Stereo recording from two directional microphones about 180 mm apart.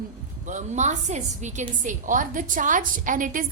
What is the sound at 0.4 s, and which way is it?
A woman's voice, 40° right (ahead or behind).